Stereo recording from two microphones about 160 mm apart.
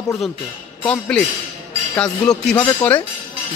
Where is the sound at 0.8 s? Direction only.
5° left (ahead or behind).